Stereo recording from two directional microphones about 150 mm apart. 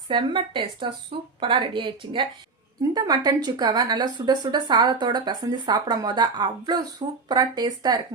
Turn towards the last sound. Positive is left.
turn(degrees=-25)  # may be behind; listen again after turning